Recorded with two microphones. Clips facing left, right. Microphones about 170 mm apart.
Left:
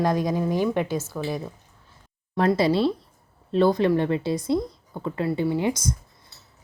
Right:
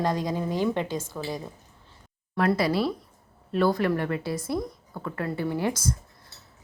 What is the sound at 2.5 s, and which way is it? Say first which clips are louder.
Speech: left 4 dB; 25° left (ahead or behind).